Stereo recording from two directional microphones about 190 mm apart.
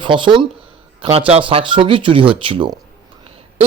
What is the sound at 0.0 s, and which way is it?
A woman's voice, 25° right (ahead or behind).